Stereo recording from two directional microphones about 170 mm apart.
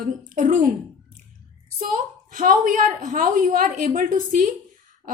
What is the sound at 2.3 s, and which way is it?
A woman's voice, 50° right (ahead or behind).